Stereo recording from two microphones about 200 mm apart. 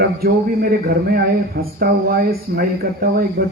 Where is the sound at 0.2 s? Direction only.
50° right (ahead or behind).